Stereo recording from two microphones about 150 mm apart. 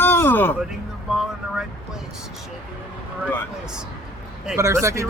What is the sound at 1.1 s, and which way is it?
Speech, 5° right (ahead or behind).